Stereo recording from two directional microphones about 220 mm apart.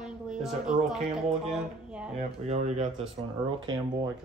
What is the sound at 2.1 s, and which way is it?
Speech, 30° right (ahead or behind).